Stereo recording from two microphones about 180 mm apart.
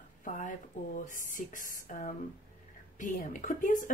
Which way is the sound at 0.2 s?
45° left (ahead or behind).